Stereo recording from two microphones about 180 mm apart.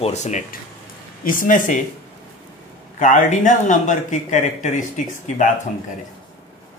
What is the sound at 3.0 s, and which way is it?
A man's voice, 45° left (ahead or behind).